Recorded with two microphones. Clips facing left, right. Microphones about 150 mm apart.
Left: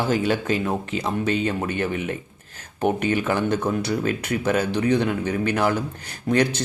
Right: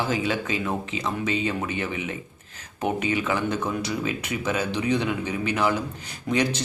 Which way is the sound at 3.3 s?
45° left (ahead or behind).